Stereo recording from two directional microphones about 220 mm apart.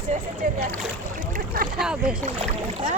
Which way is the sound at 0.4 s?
35° right (ahead or behind).